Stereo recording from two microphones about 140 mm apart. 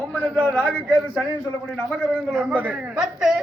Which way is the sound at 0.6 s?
10° right (ahead or behind).